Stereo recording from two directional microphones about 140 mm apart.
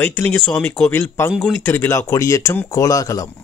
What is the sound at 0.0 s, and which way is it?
Speech, 15° left (ahead or behind).